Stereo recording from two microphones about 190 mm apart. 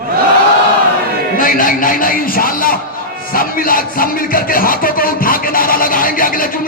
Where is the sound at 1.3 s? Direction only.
45° left (ahead or behind).